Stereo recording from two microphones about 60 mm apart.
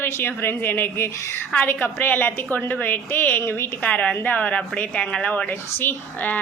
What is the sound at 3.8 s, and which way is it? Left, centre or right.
A woman's voice, left.